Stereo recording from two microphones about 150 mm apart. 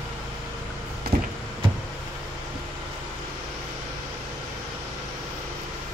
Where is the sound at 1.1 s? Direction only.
90° right.